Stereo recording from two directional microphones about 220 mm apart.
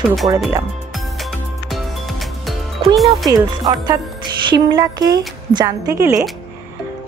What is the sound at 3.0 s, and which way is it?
A woman's voice, 15° right (ahead or behind).